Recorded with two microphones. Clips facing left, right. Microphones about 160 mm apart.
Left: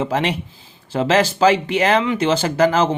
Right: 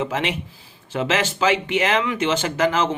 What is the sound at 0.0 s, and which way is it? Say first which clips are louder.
Speech: left 4 dB; 35° left (ahead or behind).